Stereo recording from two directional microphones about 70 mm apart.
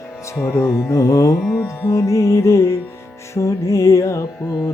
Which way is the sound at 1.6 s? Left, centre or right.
Left.